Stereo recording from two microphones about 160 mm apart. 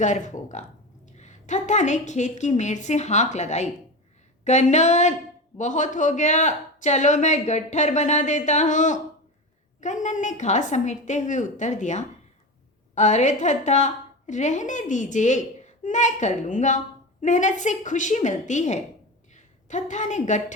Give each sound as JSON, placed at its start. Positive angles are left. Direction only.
{"t": 0.0, "sound": "a woman's voice", "side_deg": 50}